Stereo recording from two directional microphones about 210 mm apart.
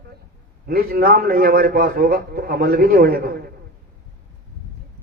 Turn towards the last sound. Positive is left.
turn(degrees=-45)  # may be behind; listen again after turning